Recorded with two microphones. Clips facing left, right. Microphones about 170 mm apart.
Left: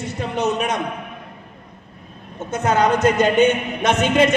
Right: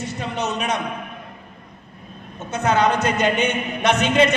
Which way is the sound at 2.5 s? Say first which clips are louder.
Left 1 dB; 45° left (ahead or behind).